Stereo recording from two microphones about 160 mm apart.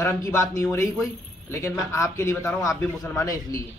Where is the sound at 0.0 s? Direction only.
20° left (ahead or behind).